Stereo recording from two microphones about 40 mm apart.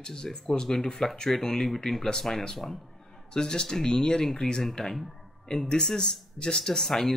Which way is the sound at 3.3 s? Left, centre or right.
Centre.